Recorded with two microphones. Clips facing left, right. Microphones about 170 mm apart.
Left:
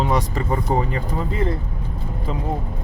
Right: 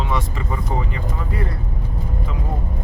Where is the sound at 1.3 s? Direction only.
20° left (ahead or behind).